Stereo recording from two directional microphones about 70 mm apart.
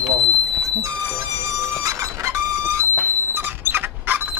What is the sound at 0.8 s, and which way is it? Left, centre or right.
Music, right.